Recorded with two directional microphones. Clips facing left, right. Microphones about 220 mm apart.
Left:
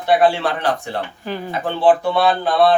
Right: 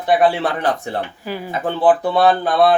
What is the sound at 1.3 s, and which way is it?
Speech, 10° right (ahead or behind).